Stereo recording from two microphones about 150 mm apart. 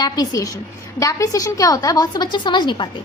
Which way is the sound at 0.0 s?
25° left (ahead or behind).